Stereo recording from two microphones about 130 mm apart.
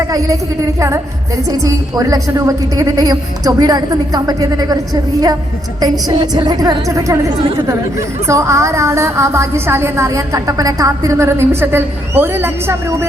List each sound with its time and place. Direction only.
0.8 s speech: 25° right (ahead or behind)
5.8 s speech: 30° right (ahead or behind)